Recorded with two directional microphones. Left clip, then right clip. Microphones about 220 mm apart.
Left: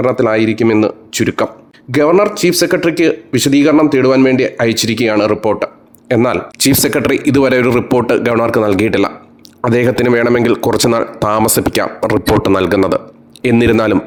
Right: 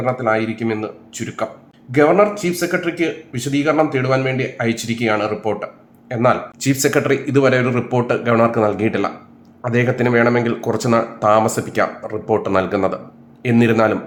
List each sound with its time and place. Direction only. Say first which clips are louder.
0.0 s speech: left 6 dB; 50° left (ahead or behind)